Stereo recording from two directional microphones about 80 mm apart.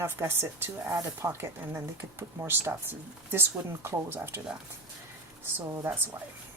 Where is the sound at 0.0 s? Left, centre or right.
Right.